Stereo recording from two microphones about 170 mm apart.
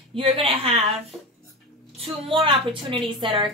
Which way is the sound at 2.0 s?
30° right (ahead or behind).